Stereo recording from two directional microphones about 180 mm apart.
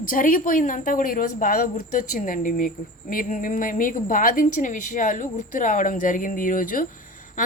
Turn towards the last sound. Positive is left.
turn(degrees=50)  # may be behind; listen again after turning